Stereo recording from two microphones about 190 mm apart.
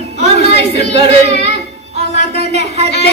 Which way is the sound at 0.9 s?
65° left (ahead or behind).